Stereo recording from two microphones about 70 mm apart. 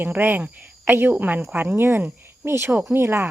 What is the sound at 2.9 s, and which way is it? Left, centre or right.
Speech, right.